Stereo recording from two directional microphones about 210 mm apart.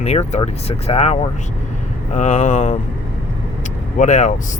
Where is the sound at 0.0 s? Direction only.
30° left (ahead or behind).